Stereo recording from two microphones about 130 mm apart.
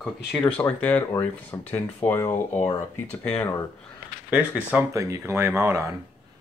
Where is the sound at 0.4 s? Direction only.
10° left (ahead or behind).